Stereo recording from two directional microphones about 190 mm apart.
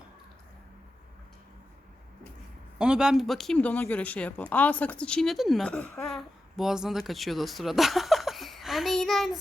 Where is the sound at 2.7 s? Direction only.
5° right (ahead or behind).